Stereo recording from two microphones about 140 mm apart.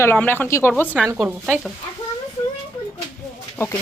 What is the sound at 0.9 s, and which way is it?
Speech, 5° right (ahead or behind).